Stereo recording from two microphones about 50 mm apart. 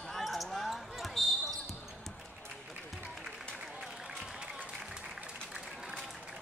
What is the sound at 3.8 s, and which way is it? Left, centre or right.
Applause, centre.